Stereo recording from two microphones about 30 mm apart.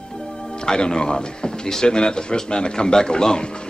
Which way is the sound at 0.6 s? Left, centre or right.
Left.